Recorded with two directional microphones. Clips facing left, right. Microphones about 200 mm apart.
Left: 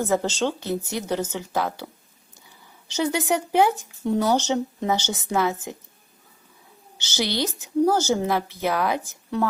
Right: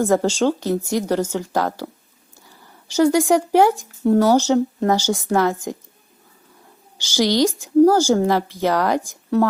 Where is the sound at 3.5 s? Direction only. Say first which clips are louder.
Right 5 dB; 10° right (ahead or behind).